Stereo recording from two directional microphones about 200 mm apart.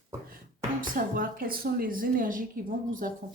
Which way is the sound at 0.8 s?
45° right (ahead or behind).